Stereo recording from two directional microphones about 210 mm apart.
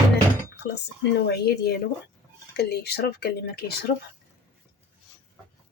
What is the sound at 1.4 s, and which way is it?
Speech, 50° left (ahead or behind).